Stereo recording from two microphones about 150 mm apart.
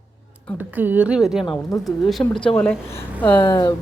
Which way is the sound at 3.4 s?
25° left (ahead or behind).